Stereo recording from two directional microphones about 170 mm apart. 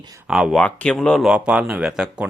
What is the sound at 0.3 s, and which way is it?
Speech, 5° right (ahead or behind).